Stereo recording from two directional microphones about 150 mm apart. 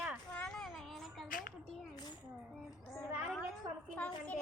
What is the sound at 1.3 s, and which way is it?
Speech, 70° left (ahead or behind).